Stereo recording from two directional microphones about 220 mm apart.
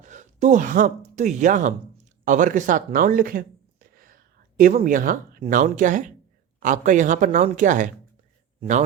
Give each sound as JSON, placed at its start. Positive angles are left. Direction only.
{"t": 0.0, "sound": "a woman's voice", "side_deg": -35}